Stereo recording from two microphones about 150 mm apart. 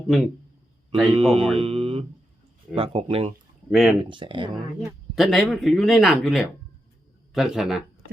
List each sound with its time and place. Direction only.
0.1 s speech: centre (ahead or behind)
1.1 s speech: 40° right (ahead or behind)
3.7 s speech: centre (ahead or behind)
4.1 s speech: 35° right (ahead or behind)
4.9 s speech: centre (ahead or behind)